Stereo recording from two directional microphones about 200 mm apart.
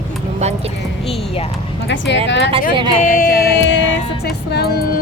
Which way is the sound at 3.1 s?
50° left (ahead or behind).